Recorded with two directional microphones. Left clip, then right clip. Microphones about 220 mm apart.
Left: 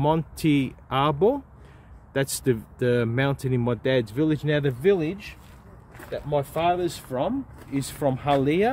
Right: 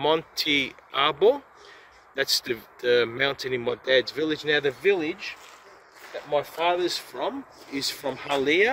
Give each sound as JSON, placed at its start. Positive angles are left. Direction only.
{"t": 0.0, "sound": "speech", "side_deg": 30}